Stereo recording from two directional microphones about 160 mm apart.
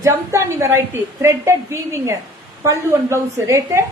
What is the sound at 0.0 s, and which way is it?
A woman's voice, 15° right (ahead or behind).